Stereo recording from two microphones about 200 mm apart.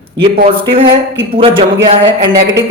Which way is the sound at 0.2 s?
25° right (ahead or behind).